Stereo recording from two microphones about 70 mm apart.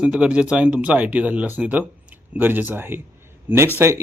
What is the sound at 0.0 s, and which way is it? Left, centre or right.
Speech, centre.